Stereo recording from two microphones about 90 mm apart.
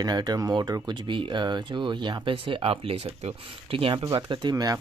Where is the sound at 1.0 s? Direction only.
65° right (ahead or behind); by 4.0 s 90° right.